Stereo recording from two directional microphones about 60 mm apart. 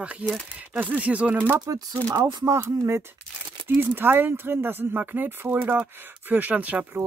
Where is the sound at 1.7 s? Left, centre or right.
Right.